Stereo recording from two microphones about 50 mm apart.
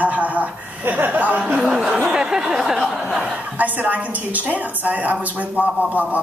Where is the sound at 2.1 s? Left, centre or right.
Centre.